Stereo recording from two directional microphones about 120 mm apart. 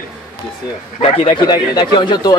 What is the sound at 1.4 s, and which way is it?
Speech, 35° left (ahead or behind).